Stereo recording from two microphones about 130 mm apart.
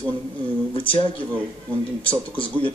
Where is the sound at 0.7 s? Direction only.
40° left (ahead or behind).